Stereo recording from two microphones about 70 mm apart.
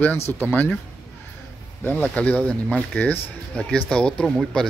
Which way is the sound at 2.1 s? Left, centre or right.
Centre.